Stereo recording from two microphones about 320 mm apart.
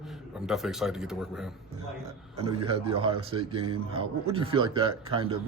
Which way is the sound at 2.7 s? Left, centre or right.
Centre.